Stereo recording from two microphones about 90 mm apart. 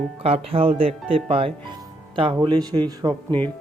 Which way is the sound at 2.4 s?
50° right (ahead or behind).